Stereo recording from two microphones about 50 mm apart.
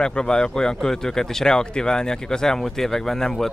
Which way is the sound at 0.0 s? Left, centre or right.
Centre.